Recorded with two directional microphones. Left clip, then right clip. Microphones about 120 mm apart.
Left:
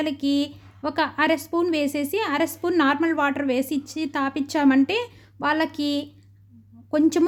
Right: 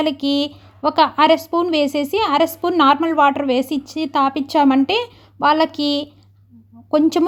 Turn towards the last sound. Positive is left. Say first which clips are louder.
# right 5 dB
turn(degrees=-10)  # may be behind; listen again after turning